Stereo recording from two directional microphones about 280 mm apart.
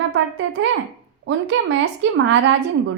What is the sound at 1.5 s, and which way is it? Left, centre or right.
A woman's voice, right.